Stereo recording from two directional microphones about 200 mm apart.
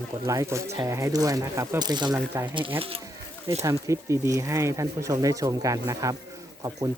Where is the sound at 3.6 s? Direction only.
15° right (ahead or behind).